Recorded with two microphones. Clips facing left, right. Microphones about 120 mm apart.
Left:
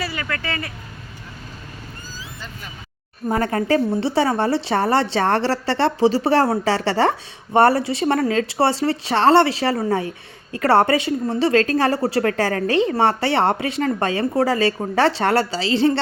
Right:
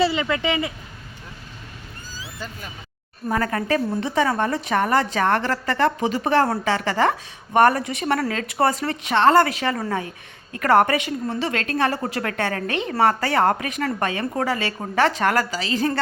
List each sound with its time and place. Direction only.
0.0 s speech: 25° right (ahead or behind)
3.2 s a woman's voice: 25° left (ahead or behind)